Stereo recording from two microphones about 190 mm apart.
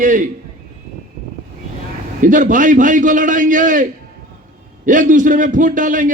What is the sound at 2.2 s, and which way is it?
A man's voice, 45° right (ahead or behind).